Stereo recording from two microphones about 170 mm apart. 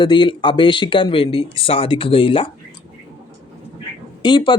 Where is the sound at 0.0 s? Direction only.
30° left (ahead or behind).